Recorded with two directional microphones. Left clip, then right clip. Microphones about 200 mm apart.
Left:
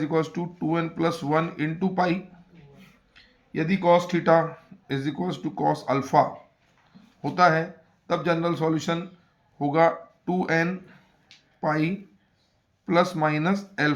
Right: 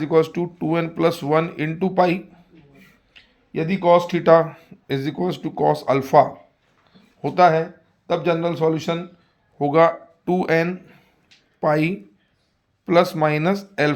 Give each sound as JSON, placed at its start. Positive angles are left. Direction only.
{"t": 0.0, "sound": "a man's voice", "side_deg": -30}